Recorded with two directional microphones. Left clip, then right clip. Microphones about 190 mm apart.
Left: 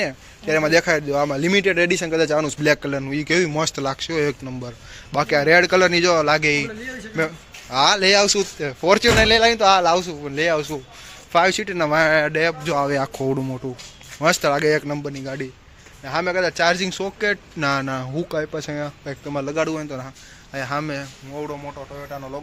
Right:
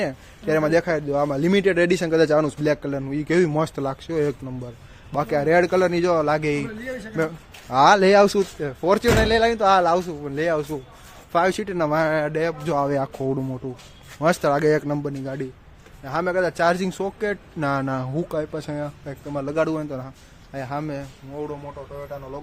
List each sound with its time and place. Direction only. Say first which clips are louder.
0.0 s a man's voice: left 1 dB; 15° right (ahead or behind)
2.6 s speech: left 4 dB; centre (ahead or behind)
3.2 s speech: even; 20° right (ahead or behind)
7.7 s speech: right 1 dB; 35° right (ahead or behind)
8.6 s speech: left 5 dB; 5° right (ahead or behind)
14.2 s speech: left 1 dB; 15° right (ahead or behind)
16.0 s a man's voice: left 1 dB; 15° right (ahead or behind)
18.3 s speech: left 3 dB; centre (ahead or behind)
19.5 s a man's voice: right 1 dB; 20° right (ahead or behind)
20.5 s speech: left 4 dB; centre (ahead or behind)